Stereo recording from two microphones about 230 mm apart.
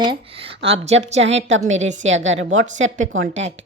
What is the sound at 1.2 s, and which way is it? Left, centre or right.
A woman's voice, right.